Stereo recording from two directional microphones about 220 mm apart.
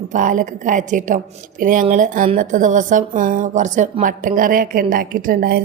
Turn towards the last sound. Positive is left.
turn(degrees=-40)  # may be behind; listen again after turning